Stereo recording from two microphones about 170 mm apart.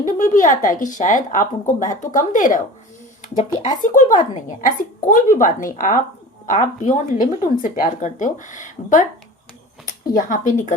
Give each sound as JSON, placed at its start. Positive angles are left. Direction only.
{"t": 0.0, "sound": "a woman's voice", "side_deg": 50}
{"t": 10.2, "sound": "a woman's voice", "side_deg": 50}